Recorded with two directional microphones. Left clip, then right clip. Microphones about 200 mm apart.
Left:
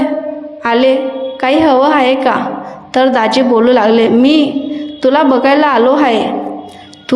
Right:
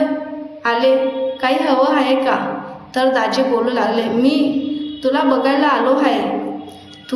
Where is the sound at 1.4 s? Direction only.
45° left (ahead or behind).